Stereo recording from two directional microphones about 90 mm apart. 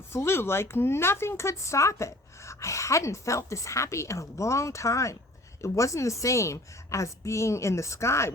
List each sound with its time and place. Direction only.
0.1 s speech: 30° left (ahead or behind)